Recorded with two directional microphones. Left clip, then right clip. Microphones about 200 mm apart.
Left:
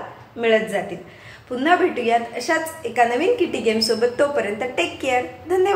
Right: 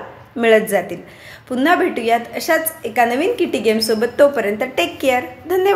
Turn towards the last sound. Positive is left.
turn(degrees=-35)  # may be behind; listen again after turning